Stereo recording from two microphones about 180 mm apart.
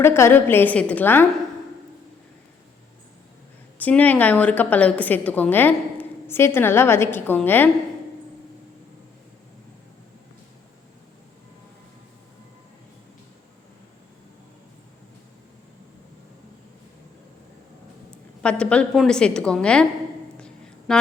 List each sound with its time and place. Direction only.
0.0 s a woman's voice: 15° left (ahead or behind)
3.8 s a woman's voice: 10° left (ahead or behind)
18.4 s a woman's voice: 5° left (ahead or behind)
20.4 s a sound: 5° left (ahead or behind)